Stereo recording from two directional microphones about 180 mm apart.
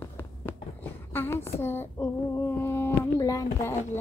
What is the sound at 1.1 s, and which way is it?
Child singing, 15° left (ahead or behind).